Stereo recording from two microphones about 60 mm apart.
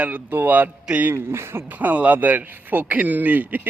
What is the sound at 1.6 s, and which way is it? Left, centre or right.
A man's voice, right.